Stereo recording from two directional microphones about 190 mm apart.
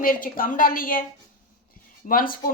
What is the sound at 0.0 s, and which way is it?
A woman's voice, 50° left (ahead or behind).